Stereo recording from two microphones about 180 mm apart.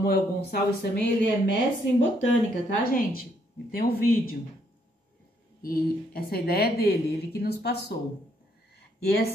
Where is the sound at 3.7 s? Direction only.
60° left (ahead or behind).